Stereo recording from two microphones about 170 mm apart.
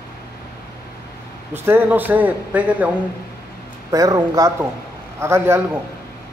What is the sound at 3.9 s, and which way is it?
A man's voice, 20° right (ahead or behind).